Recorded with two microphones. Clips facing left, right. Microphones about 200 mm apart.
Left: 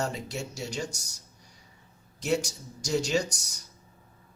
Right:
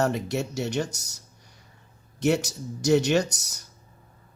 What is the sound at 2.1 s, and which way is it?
Speech, 65° right (ahead or behind).